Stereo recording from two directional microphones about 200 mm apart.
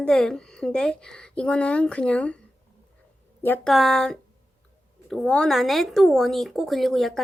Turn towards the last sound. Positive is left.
turn(degrees=0)  # may be behind; listen again after turning